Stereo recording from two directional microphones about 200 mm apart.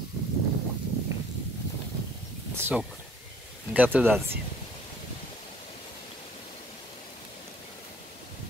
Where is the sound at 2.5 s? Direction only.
10° right (ahead or behind).